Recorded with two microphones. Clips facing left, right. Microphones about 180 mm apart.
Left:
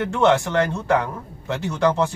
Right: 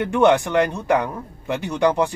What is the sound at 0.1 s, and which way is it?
Speech, 15° right (ahead or behind).